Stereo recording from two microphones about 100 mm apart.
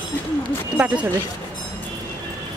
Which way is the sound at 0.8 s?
20° right (ahead or behind).